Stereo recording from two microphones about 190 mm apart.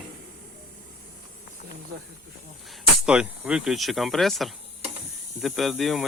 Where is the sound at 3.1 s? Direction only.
5° right (ahead or behind).